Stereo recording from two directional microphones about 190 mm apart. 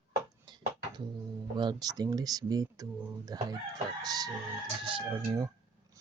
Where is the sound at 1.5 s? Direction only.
20° right (ahead or behind).